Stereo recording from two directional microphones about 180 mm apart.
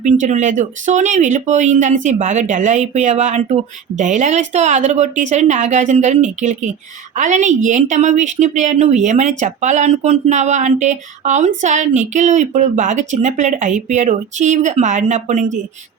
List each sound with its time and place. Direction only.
0.0 s speech: 40° right (ahead or behind)